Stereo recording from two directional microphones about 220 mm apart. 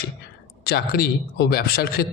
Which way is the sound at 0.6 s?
45° left (ahead or behind).